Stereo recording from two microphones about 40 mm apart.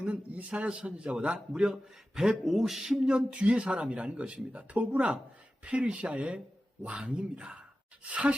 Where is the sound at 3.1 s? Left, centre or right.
Right.